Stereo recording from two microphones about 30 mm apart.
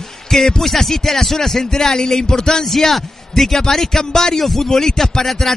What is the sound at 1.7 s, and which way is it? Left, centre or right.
A man's voice, left.